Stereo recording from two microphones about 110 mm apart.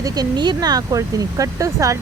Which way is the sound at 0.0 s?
40° right (ahead or behind).